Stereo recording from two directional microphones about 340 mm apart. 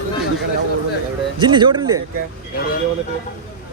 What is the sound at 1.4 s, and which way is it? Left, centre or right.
Speech, centre.